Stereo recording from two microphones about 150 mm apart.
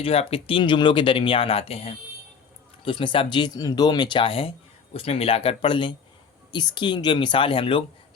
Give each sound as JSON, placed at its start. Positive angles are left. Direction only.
{"t": 0.0, "sound": "speech", "side_deg": 40}